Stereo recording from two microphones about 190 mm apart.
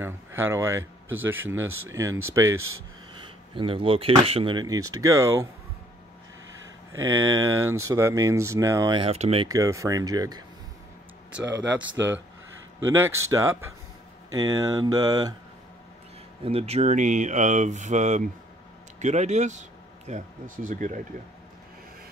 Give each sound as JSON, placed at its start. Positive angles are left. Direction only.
{"t": 0.0, "sound": "speech", "side_deg": -10}
{"t": 0.7, "sound": "speech", "side_deg": -90}
{"t": 1.2, "sound": "speech", "side_deg": -10}
{"t": 1.5, "sound": "speech", "side_deg": -90}
{"t": 1.9, "sound": "speech", "side_deg": -15}
{"t": 2.4, "sound": "speech", "side_deg": -90}
{"t": 3.2, "sound": "speech", "side_deg": -25}
{"t": 6.5, "sound": "a sound", "side_deg": -90}
{"t": 7.1, "sound": "speech", "side_deg": -15}
{"t": 9.5, "sound": "speech", "side_deg": -15}
{"t": 11.4, "sound": "speech", "side_deg": -75}
{"t": 12.8, "sound": "speech", "side_deg": -15}
{"t": 16.4, "sound": "speech", "side_deg": -30}